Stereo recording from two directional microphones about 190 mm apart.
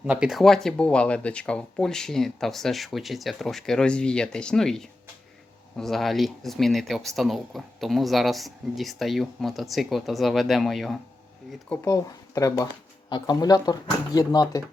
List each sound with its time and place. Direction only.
0.0 s speech: 5° right (ahead or behind)
11.7 s speech: 15° left (ahead or behind)